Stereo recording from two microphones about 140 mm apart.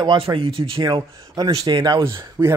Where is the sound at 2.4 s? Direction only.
20° right (ahead or behind).